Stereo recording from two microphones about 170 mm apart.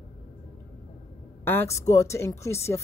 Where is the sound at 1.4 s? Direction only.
10° left (ahead or behind).